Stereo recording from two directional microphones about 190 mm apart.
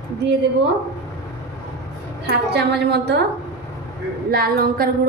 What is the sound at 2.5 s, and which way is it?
Speech, 60° right (ahead or behind).